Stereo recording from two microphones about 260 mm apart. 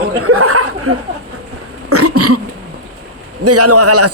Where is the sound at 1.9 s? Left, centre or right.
Right.